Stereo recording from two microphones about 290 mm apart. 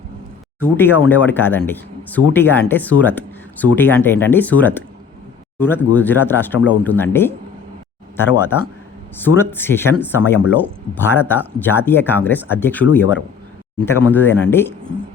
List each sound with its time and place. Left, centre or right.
0.6 s a man's voice: centre